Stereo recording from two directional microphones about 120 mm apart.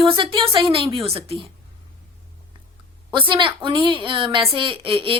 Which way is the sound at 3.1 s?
45° right (ahead or behind).